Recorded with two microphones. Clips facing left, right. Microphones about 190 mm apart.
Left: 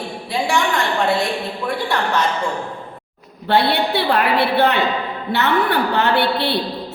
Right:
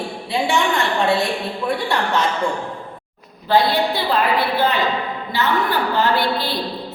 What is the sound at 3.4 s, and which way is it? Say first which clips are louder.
A woman's voice: even; 65° left (ahead or behind).